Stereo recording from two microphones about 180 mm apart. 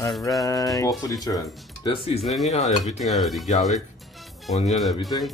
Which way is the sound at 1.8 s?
30° left (ahead or behind).